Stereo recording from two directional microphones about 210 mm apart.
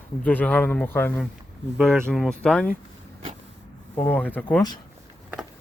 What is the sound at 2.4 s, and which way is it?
Speech, 5° left (ahead or behind).